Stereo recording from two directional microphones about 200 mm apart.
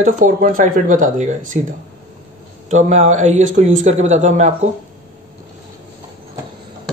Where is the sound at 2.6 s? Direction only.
35° right (ahead or behind).